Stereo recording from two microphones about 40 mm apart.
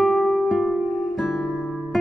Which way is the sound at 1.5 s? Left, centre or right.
Centre.